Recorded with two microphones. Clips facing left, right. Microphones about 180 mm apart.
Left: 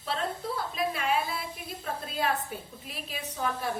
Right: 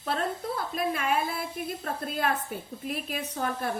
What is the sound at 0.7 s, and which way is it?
A woman's voice, 50° right (ahead or behind).